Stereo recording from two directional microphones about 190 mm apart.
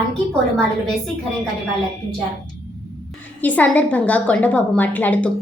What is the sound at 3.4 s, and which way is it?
A woman's voice, 10° left (ahead or behind).